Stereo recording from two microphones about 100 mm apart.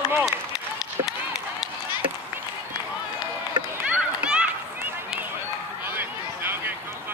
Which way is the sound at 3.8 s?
10° right (ahead or behind).